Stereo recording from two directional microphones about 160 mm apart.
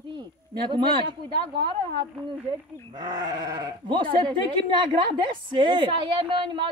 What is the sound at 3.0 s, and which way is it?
Speech, 25° right (ahead or behind).